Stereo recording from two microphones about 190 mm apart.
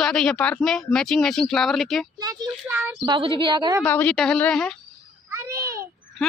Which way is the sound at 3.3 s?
25° right (ahead or behind).